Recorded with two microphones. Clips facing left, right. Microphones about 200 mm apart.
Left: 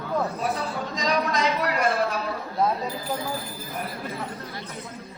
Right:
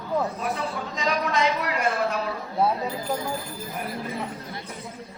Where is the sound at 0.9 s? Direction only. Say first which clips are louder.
Even; 35° left (ahead or behind).